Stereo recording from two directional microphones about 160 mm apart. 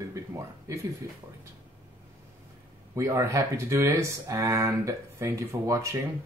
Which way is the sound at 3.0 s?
20° right (ahead or behind).